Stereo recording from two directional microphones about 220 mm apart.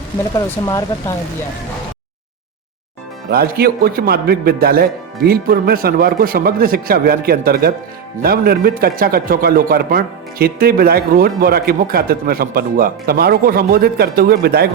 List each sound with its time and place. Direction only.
0.3 s speech: 15° left (ahead or behind)
3.2 s speech: 45° right (ahead or behind)